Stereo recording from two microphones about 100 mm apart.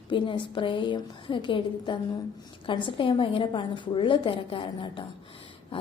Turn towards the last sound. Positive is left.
turn(degrees=60)  # may be behind; listen again after turning